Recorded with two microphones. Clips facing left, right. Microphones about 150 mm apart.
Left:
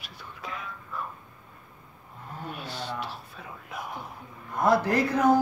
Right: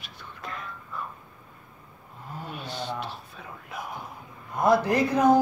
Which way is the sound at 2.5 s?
5° left (ahead or behind).